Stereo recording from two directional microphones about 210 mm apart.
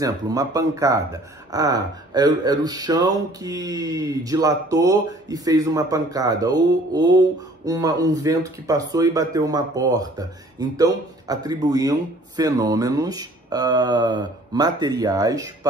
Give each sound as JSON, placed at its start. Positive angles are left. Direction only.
{"t": 0.0, "sound": "speech", "side_deg": -15}